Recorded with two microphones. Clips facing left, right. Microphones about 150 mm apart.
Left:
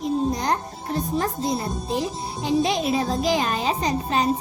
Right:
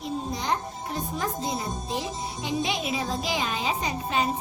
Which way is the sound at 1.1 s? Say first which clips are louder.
Left 5 dB; 40° left (ahead or behind).